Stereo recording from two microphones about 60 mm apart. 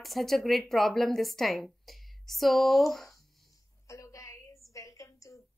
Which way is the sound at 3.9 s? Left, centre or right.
Left.